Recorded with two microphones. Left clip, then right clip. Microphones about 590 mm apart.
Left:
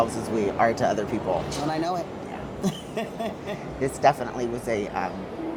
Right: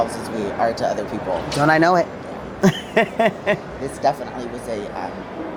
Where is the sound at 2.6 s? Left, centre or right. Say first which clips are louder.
Right 14 dB; right.